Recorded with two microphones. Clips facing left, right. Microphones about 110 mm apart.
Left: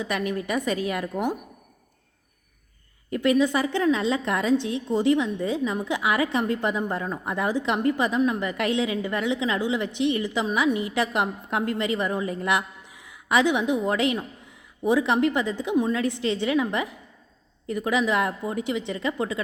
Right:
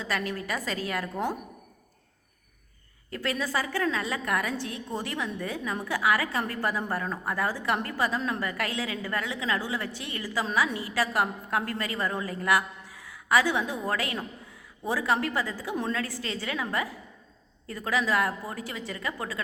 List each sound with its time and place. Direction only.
0.0 s a woman's voice: 20° left (ahead or behind)
3.1 s a woman's voice: 20° left (ahead or behind)